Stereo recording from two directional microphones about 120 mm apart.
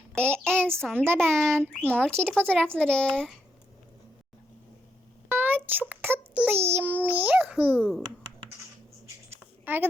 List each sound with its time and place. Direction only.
0.4 s a sound: 20° right (ahead or behind)
0.8 s child singing: 5° left (ahead or behind)
1.0 s a child's voice: 20° right (ahead or behind)
1.8 s speech: 10° left (ahead or behind)
5.3 s child singing: 15° right (ahead or behind)
6.7 s a child's voice: 15° right (ahead or behind)
7.8 s child singing: 5° left (ahead or behind)
9.7 s a child's voice: 15° right (ahead or behind)